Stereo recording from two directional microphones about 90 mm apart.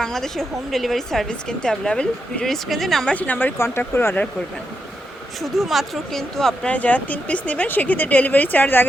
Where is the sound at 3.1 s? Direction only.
15° left (ahead or behind).